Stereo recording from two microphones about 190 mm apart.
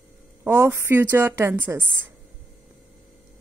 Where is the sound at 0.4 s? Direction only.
15° right (ahead or behind).